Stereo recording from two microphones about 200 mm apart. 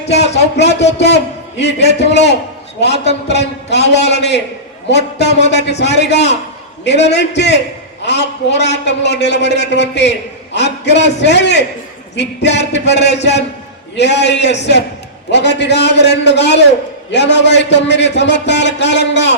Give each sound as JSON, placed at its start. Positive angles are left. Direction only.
{"t": 0.1, "sound": "a man's voice", "side_deg": 60}